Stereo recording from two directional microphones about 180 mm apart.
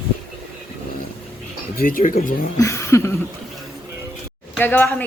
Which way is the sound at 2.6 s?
15° left (ahead or behind).